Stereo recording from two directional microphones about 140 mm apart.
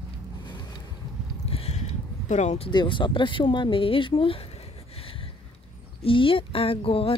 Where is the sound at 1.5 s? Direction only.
45° left (ahead or behind).